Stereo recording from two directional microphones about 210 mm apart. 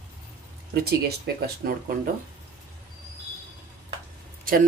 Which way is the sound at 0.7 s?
50° right (ahead or behind).